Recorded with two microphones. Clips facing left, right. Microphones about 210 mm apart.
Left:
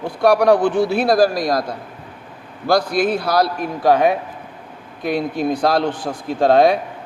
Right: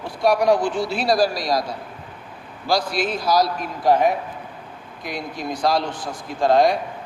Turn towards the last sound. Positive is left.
turn(degrees=60)  # may be behind; listen again after turning